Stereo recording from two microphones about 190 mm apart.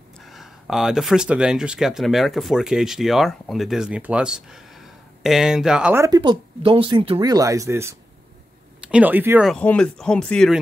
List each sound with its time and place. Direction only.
0.2 s speech: centre (ahead or behind)
6.0 s speech: 20° right (ahead or behind)
9.5 s speech: 5° left (ahead or behind)